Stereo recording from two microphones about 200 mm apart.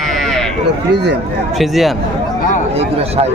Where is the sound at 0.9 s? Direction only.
55° right (ahead or behind).